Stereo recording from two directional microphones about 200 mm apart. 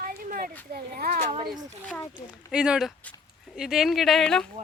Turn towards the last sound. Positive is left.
turn(degrees=0)  # may be behind; listen again after turning